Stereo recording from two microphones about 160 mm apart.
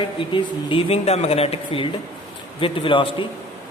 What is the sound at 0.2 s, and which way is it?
Speech, 30° left (ahead or behind).